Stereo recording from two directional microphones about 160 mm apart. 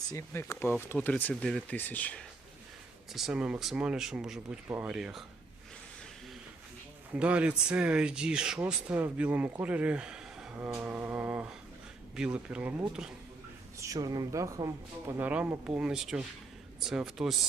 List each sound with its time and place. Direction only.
0.1 s speech: 15° left (ahead or behind)
3.1 s speech: centre (ahead or behind)
7.1 s speech: 5° right (ahead or behind)
13.7 s speech: 20° right (ahead or behind); by 17.3 s 5° right (ahead or behind)